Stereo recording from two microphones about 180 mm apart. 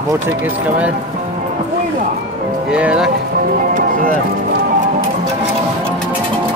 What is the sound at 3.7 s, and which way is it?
Music, 50° right (ahead or behind).